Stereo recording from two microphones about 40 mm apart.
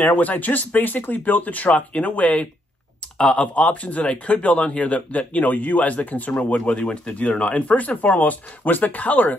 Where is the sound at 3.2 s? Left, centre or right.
Left.